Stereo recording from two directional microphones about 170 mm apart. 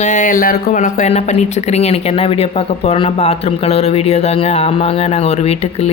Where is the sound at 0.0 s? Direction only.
50° left (ahead or behind).